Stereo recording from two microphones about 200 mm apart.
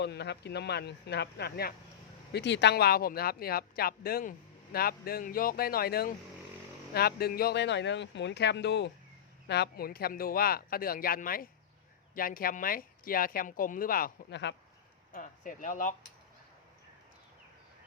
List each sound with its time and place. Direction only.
0.0 s speech: 55° left (ahead or behind)
15.1 s speech: 40° left (ahead or behind)